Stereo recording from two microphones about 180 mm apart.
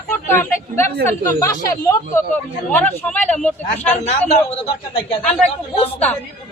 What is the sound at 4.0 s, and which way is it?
Speech, 35° left (ahead or behind).